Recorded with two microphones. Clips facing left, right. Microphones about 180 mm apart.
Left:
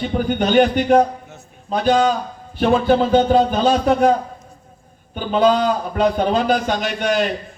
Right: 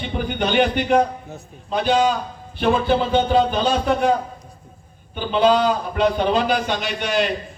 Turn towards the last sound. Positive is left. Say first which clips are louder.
# left 3 dB
turn(degrees=45)  # may be behind; listen again after turning